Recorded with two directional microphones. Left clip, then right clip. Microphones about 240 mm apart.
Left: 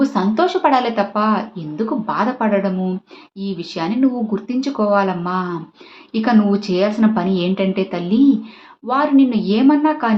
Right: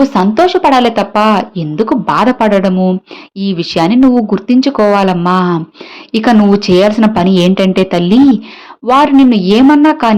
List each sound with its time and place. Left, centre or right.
0.0 s speech: right